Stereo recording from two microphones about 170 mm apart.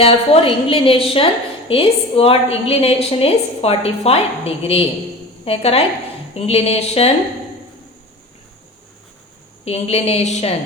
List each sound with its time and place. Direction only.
0.0 s a woman's voice: 35° left (ahead or behind)
9.6 s a woman's voice: 35° left (ahead or behind)